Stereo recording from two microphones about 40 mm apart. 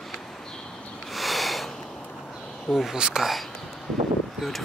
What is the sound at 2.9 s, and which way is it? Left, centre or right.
Speech, centre.